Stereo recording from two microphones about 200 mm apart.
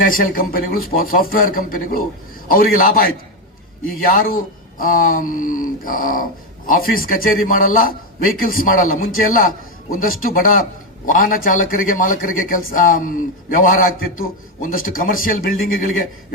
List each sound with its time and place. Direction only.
0.0 s a man's voice: 45° left (ahead or behind)